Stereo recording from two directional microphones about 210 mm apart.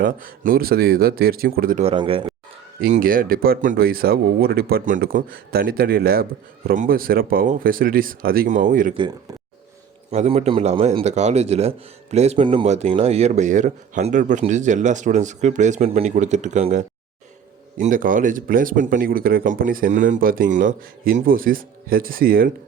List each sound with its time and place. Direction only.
0.0 s speech: 40° right (ahead or behind)
1.8 s speech: 25° right (ahead or behind)
2.8 s speech: 40° right (ahead or behind)
10.1 s speech: 30° right (ahead or behind)